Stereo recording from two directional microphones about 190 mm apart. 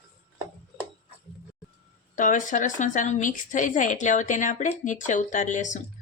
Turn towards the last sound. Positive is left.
turn(degrees=40)  # may be behind; listen again after turning